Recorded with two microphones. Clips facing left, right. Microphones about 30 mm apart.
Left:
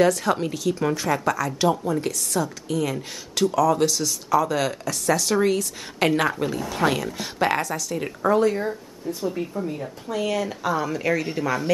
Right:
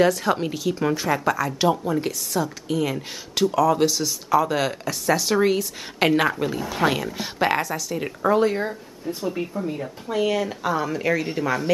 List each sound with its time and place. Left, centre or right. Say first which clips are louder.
0.0 s speech: even; centre
8.4 s speech: even; right